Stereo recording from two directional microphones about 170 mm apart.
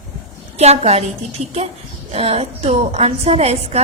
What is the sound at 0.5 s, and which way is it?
Speech, 40° right (ahead or behind).